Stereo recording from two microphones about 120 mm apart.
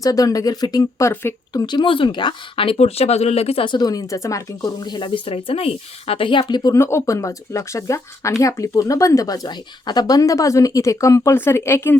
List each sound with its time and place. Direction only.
0.0 s speech: 30° left (ahead or behind)
1.6 s speech: 40° left (ahead or behind)
6.7 s speech: 20° left (ahead or behind)